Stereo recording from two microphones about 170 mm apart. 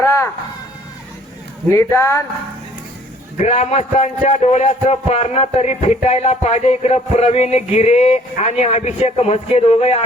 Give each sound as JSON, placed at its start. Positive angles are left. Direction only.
{"t": 0.0, "sound": "a sound", "side_deg": 15}
{"t": 1.7, "sound": "speech", "side_deg": 15}
{"t": 3.4, "sound": "a man's voice", "side_deg": 45}